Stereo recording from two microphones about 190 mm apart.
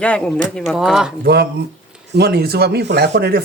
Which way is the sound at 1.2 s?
55° right (ahead or behind).